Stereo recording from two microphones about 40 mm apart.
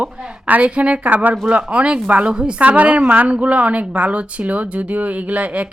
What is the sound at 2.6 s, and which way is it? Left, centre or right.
A woman's voice, right.